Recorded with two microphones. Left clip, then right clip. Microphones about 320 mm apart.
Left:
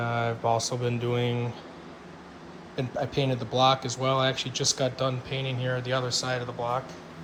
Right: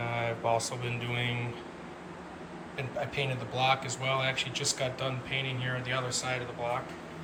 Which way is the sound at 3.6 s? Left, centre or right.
Centre.